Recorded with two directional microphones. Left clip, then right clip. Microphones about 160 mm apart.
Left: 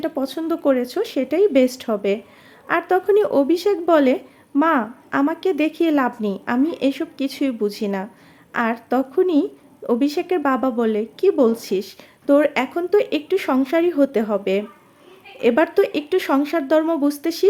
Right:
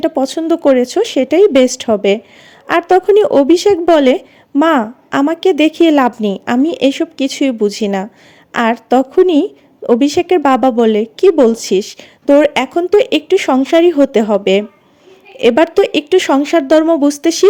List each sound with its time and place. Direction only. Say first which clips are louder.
0.0 s a woman's voice: right 9 dB; 40° right (ahead or behind)